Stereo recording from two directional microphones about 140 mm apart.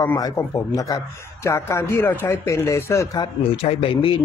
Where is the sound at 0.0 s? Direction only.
25° left (ahead or behind).